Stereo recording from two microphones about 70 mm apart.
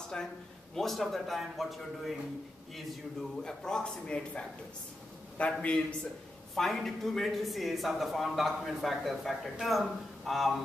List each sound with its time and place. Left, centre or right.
0.7 s a man's voice: centre
6.5 s speech: centre